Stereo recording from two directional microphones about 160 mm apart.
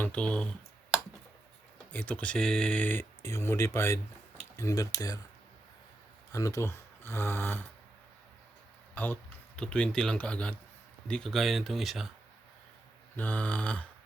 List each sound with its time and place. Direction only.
0.0 s speech: 10° left (ahead or behind)
1.9 s speech: 10° left (ahead or behind)
6.3 s speech: 20° left (ahead or behind)
9.0 s speech: 10° left (ahead or behind)
13.1 s speech: 10° left (ahead or behind)